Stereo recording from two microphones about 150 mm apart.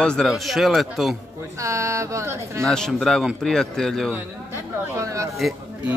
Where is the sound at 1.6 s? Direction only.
20° right (ahead or behind).